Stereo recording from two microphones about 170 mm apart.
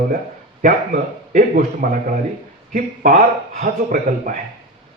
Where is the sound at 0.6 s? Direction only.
55° right (ahead or behind).